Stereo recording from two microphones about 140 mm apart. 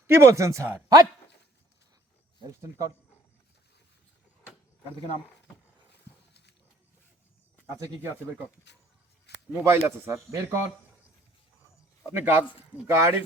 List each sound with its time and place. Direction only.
0.1 s speech: 20° right (ahead or behind)
2.5 s speech: 25° right (ahead or behind)
9.5 s speech: 15° right (ahead or behind)
12.1 s a man's voice: 15° right (ahead or behind)